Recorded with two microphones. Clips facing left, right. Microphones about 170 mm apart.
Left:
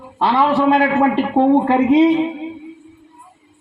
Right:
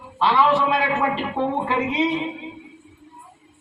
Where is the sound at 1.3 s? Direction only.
50° left (ahead or behind).